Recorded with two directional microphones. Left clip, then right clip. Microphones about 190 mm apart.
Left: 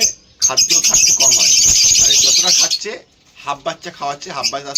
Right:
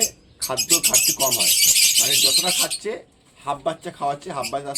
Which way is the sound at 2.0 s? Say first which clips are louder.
Left 6 dB; centre (ahead or behind).